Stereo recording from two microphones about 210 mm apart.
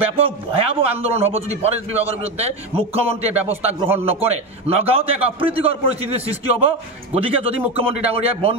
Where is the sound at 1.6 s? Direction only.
30° right (ahead or behind).